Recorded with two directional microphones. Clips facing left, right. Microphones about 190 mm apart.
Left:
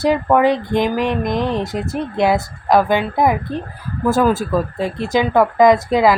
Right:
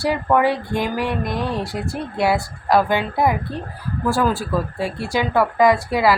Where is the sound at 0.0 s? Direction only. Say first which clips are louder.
Left 4 dB; 20° left (ahead or behind).